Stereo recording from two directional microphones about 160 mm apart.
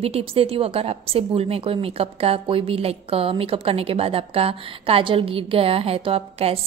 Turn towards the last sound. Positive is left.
turn(degrees=-35)  # may be behind; listen again after turning